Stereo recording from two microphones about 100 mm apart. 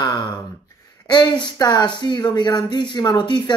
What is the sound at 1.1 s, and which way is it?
A man's voice, 50° left (ahead or behind).